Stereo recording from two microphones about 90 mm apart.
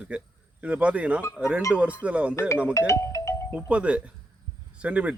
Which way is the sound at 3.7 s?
15° right (ahead or behind).